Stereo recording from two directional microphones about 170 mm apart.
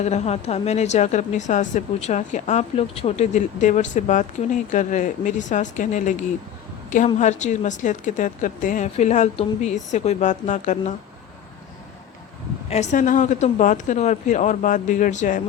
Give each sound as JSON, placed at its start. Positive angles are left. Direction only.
{"t": 0.0, "sound": "a woman's voice", "side_deg": 40}
{"t": 7.2, "sound": "a woman's voice", "side_deg": 45}
{"t": 12.7, "sound": "a woman's voice", "side_deg": 45}